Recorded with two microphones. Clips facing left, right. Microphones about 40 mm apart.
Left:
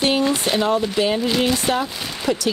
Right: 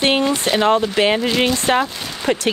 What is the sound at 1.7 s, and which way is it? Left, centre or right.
Speech, right.